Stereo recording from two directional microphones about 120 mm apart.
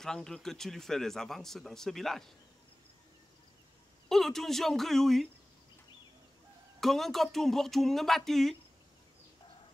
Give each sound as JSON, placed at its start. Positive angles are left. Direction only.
{"t": 0.0, "sound": "speech", "side_deg": 5}
{"t": 4.1, "sound": "speech", "side_deg": 0}
{"t": 6.8, "sound": "speech", "side_deg": 0}